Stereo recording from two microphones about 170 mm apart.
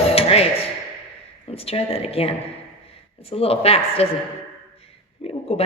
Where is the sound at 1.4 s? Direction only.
35° left (ahead or behind).